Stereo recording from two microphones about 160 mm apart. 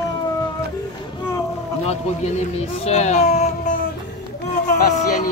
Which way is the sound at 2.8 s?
45° left (ahead or behind).